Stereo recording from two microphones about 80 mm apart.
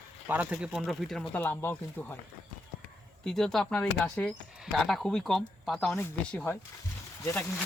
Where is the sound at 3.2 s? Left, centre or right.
Centre.